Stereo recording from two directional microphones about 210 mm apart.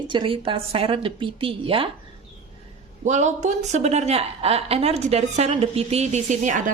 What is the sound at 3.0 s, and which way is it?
A woman's voice, 35° right (ahead or behind).